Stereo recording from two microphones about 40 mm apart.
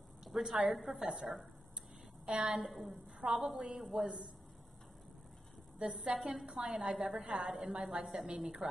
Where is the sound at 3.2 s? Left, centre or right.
Centre.